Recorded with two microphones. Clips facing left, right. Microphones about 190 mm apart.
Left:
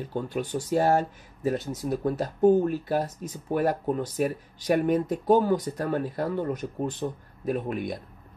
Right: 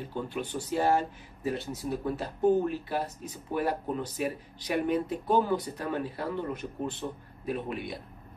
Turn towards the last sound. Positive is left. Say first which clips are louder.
# left 5 dB
turn(degrees=45)  # may be behind; listen again after turning